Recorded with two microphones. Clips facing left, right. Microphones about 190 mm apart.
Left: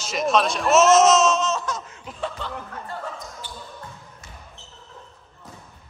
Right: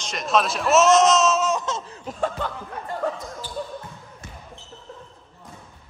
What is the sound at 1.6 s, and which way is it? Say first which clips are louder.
Laughter: right 2 dB; 30° right (ahead or behind).